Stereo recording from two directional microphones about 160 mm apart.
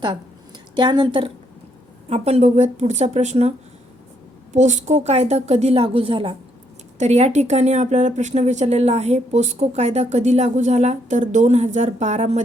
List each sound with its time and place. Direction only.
0.8 s a woman's voice: 30° right (ahead or behind)
2.0 s speech: 40° right (ahead or behind)
4.5 s speech: 45° right (ahead or behind)